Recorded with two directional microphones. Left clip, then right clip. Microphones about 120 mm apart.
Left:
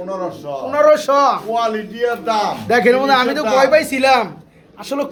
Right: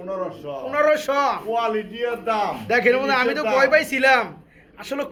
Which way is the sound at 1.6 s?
55° right (ahead or behind).